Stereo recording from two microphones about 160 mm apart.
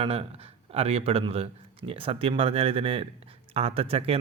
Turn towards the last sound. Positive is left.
turn(degrees=-35)  # may be behind; listen again after turning